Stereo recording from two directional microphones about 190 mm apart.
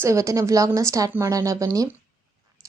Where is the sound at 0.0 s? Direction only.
15° right (ahead or behind).